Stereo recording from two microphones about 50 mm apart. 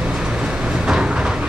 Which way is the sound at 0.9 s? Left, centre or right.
Centre.